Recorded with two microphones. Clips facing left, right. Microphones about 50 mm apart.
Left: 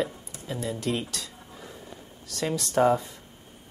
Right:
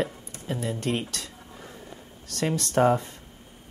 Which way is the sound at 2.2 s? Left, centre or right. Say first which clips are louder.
Right 2 dB; right.